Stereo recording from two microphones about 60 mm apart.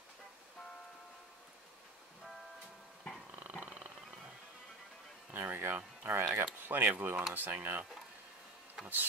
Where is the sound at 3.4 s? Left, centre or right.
Right.